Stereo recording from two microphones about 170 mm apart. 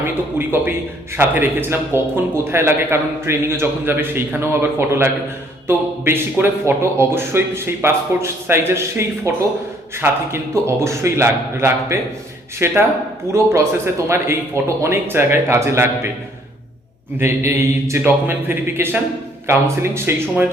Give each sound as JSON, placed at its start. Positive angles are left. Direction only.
{"t": 0.0, "sound": "speech", "side_deg": -10}
{"t": 17.2, "sound": "speech", "side_deg": -15}